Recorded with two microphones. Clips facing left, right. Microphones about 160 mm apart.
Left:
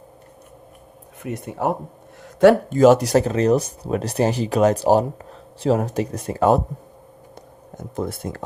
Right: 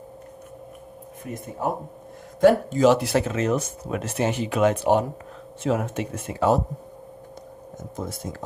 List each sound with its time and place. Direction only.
1.2 s speech: 75° left (ahead or behind)
2.7 s speech: 45° left (ahead or behind)
7.8 s speech: 60° left (ahead or behind)